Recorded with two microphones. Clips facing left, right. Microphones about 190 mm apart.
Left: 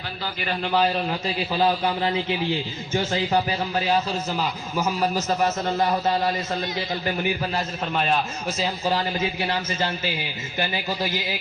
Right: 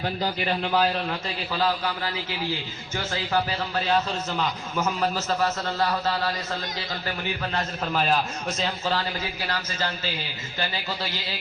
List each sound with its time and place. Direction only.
0.6 s a man's voice: centre (ahead or behind)
1.5 s a man's voice: 20° left (ahead or behind)
7.5 s a man's voice: centre (ahead or behind)
9.4 s a man's voice: 20° left (ahead or behind)